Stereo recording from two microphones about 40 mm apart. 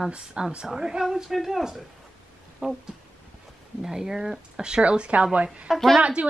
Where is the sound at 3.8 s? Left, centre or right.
Centre; by 5.7 s right.